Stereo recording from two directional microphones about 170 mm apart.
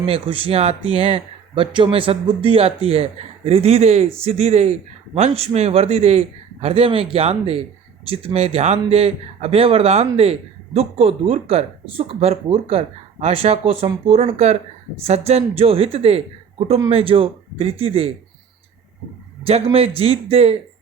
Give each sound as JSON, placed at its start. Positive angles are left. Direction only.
{"t": 0.0, "sound": "speech", "side_deg": -30}
{"t": 19.7, "sound": "speech", "side_deg": -35}